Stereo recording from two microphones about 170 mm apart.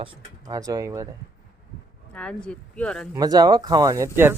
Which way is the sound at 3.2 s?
25° right (ahead or behind).